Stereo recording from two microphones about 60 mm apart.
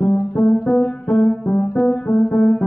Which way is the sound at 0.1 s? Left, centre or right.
Left.